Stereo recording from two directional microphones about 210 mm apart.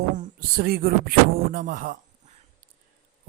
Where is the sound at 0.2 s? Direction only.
45° right (ahead or behind).